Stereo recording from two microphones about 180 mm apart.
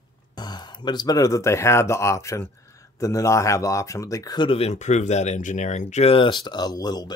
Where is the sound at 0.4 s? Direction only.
25° left (ahead or behind).